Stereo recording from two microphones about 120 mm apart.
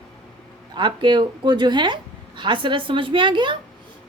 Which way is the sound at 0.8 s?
40° right (ahead or behind).